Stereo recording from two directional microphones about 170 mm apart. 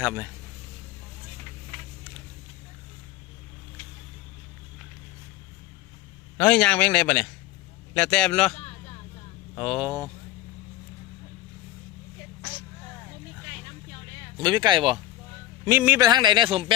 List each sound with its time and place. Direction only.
0.0 s a man's voice: 10° right (ahead or behind)
6.3 s a man's voice: 5° left (ahead or behind)
9.6 s speech: centre (ahead or behind)
14.3 s a man's voice: 25° right (ahead or behind)
15.6 s a man's voice: 10° right (ahead or behind)
16.0 s a man's voice: 25° right (ahead or behind)